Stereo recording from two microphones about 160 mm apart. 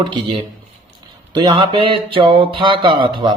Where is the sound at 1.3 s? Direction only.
30° right (ahead or behind).